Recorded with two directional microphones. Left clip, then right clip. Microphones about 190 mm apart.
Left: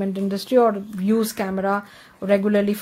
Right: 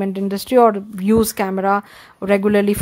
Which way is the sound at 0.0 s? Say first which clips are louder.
Right 3 dB; 30° right (ahead or behind).